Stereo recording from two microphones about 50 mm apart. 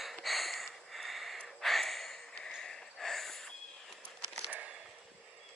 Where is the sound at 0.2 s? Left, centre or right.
Centre.